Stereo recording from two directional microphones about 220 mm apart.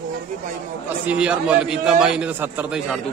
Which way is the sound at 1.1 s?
5° right (ahead or behind).